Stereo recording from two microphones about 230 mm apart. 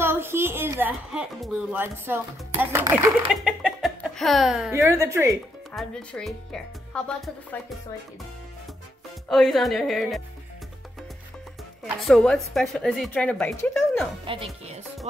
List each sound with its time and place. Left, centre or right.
0.0 s a woman's voice: centre
4.7 s a woman's voice: centre
5.7 s a woman's voice: centre
9.3 s a woman's voice: centre
11.8 s a woman's voice: centre
14.2 s speech: right